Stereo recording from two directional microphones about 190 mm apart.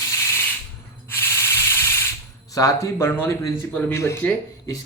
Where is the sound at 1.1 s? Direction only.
15° left (ahead or behind).